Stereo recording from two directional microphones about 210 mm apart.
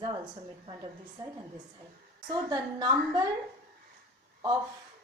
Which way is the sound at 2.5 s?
20° right (ahead or behind).